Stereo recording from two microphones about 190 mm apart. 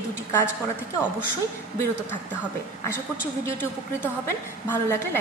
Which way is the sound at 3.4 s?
10° left (ahead or behind).